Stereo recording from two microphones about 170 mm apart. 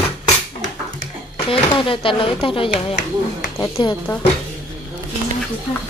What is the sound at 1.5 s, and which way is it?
Speech, 30° left (ahead or behind).